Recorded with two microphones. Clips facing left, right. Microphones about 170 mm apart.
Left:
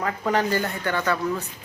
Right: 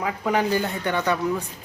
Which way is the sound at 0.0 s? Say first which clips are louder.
Even; 10° right (ahead or behind).